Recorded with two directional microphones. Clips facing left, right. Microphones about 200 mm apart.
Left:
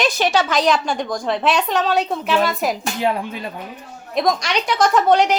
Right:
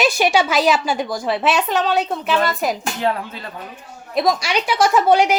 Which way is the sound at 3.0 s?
15° left (ahead or behind).